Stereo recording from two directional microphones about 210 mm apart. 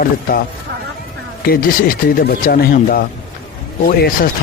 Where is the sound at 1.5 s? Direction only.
45° left (ahead or behind).